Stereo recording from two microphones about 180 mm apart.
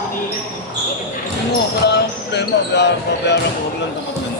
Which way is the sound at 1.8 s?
70° left (ahead or behind).